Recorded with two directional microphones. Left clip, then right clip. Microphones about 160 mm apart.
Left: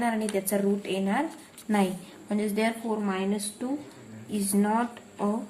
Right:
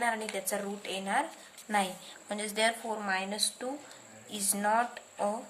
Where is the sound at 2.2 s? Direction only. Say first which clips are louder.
Left 2 dB; 25° right (ahead or behind).